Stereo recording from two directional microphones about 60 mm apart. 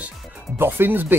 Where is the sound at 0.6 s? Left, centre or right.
Right.